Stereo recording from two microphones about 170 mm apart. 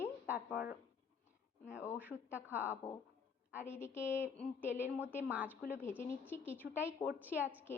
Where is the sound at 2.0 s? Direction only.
10° right (ahead or behind).